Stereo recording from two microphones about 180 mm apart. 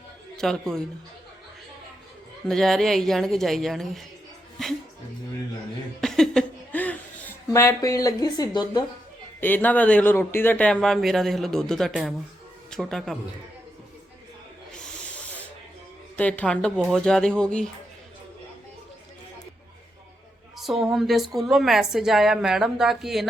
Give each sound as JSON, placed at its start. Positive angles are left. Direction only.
{"t": 0.3, "sound": "speech", "side_deg": 5}
{"t": 2.5, "sound": "speech", "side_deg": 0}
{"t": 6.0, "sound": "a sound", "side_deg": 5}
{"t": 9.4, "sound": "speech", "side_deg": 10}
{"t": 14.7, "sound": "snake", "side_deg": 5}
{"t": 16.1, "sound": "speech", "side_deg": 10}
{"t": 20.6, "sound": "speech", "side_deg": 0}